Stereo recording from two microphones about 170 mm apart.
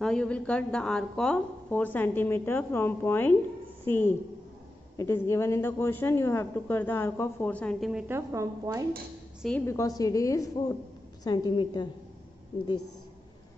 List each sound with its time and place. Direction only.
0.0 s a woman's voice: 5° left (ahead or behind)
7.9 s speech: 15° right (ahead or behind)
9.7 s a woman's voice: 20° left (ahead or behind)